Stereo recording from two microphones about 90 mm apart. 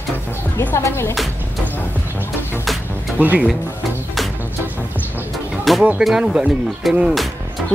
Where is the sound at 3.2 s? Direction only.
20° right (ahead or behind).